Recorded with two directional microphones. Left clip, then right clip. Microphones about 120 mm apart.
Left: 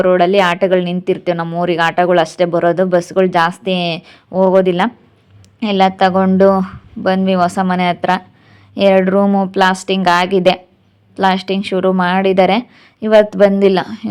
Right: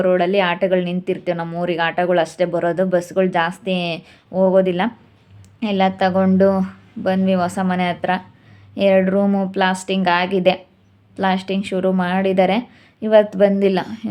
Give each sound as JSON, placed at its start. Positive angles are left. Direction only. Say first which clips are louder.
{"t": 0.0, "sound": "speech", "louder": "left 5 dB", "side_deg": 25}